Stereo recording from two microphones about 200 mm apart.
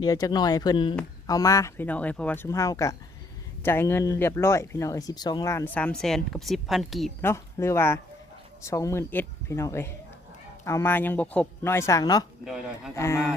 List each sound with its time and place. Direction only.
0.0 s speech: 20° left (ahead or behind); by 7.1 s centre (ahead or behind)
7.2 s speech: 10° left (ahead or behind)
12.5 s speech: 5° right (ahead or behind)
12.9 s speech: 15° left (ahead or behind)